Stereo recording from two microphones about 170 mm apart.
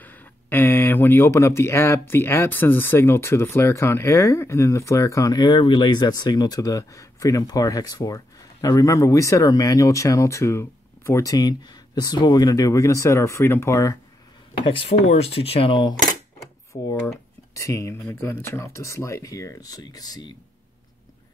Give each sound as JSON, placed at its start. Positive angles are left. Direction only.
{"t": 0.0, "sound": "speech", "side_deg": 10}
{"t": 15.0, "sound": "speech", "side_deg": 35}
{"t": 17.6, "sound": "speech", "side_deg": 20}